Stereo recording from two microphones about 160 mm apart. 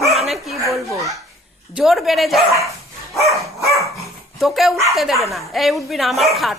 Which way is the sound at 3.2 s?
20° right (ahead or behind).